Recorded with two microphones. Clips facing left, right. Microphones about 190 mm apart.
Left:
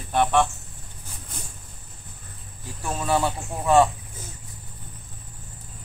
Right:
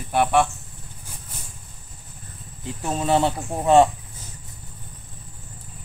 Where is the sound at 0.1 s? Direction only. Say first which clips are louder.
Right 1 dB; 10° right (ahead or behind).